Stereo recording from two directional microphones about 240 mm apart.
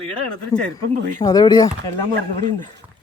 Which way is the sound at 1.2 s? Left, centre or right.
Centre.